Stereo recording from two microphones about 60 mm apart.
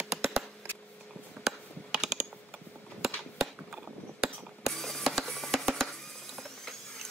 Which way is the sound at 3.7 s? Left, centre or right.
Centre.